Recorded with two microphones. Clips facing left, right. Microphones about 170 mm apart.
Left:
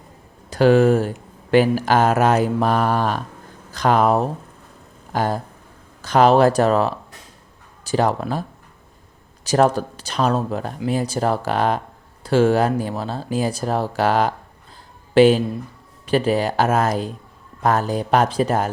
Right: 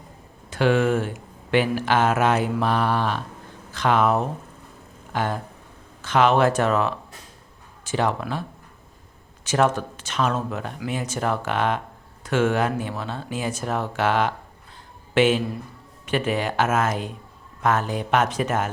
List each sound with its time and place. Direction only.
0.5 s speech: 40° left (ahead or behind)